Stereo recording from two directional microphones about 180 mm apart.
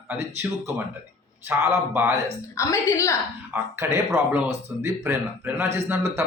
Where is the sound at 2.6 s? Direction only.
15° left (ahead or behind).